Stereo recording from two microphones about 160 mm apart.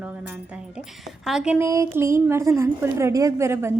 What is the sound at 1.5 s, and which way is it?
Speech, 20° right (ahead or behind).